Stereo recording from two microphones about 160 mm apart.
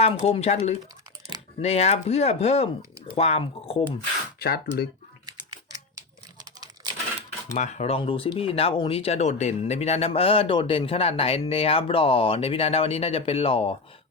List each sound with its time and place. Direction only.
0.0 s speech: 40° left (ahead or behind)
4.4 s speech: 80° left
7.5 s speech: 45° left (ahead or behind)